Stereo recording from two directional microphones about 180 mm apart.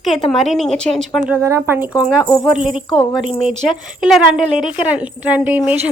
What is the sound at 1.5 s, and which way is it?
Speech, 15° right (ahead or behind).